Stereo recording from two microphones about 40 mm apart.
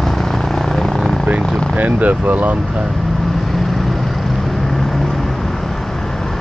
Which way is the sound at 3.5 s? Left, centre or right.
Centre.